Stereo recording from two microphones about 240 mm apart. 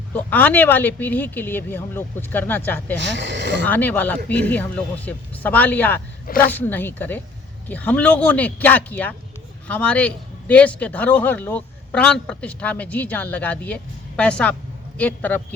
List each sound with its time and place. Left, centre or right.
0.1 s speech: centre
3.0 s speech: right
3.7 s a man's voice: centre